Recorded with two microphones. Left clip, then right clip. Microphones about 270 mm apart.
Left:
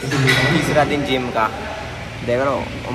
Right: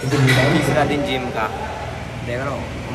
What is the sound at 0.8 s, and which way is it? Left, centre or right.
Speech, centre.